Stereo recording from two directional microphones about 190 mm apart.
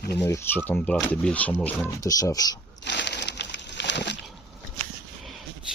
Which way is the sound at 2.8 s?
65° left (ahead or behind).